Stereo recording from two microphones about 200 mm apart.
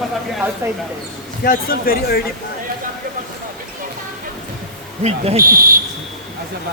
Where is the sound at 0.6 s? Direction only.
15° right (ahead or behind).